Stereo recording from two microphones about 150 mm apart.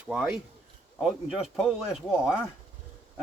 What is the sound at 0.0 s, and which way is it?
Speech, 5° right (ahead or behind).